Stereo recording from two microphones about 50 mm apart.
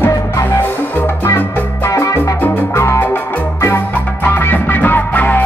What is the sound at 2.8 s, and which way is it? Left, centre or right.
Music, left.